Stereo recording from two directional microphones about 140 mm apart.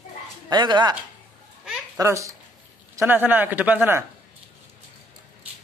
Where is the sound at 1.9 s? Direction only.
20° right (ahead or behind).